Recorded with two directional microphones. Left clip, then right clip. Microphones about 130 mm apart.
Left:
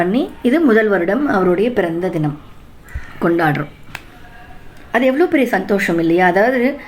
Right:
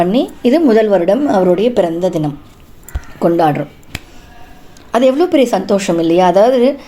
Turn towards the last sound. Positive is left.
turn(degrees=-35)  # may be behind; listen again after turning